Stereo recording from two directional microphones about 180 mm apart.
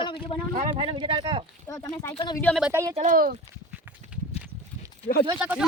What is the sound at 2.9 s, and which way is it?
Speech, 50° right (ahead or behind).